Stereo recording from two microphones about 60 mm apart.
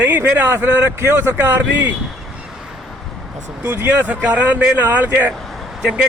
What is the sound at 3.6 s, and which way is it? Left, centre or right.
Speech, right.